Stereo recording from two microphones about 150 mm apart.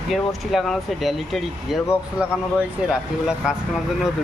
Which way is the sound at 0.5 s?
Centre (ahead or behind).